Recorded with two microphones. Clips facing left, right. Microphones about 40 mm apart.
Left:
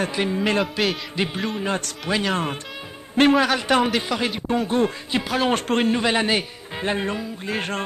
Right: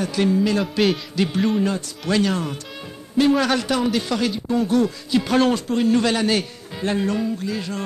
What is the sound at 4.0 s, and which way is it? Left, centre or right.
A man's voice, left.